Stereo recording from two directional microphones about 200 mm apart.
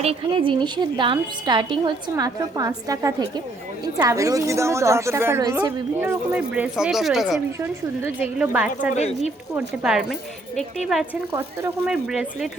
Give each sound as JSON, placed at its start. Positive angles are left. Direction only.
{"t": 0.0, "sound": "a woman's voice", "side_deg": -30}
{"t": 9.0, "sound": "speech", "side_deg": 30}
{"t": 9.6, "sound": "speech", "side_deg": -5}
{"t": 11.3, "sound": "speech", "side_deg": -10}